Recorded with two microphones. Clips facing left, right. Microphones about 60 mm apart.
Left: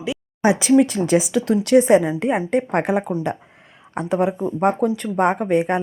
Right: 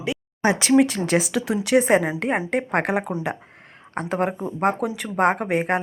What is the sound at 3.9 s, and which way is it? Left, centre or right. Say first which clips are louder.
Speech: left 4 dB; right.